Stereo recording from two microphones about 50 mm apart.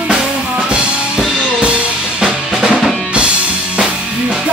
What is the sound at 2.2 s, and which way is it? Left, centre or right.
Drum kit, centre.